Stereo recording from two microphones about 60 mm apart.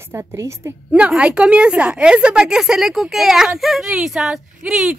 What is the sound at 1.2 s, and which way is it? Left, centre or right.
Speech, centre.